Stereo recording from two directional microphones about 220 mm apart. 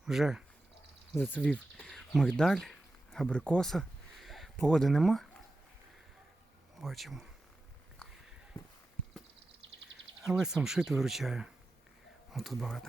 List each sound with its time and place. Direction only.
0.0 s speech: centre (ahead or behind)
6.8 s speech: centre (ahead or behind)
10.2 s speech: centre (ahead or behind)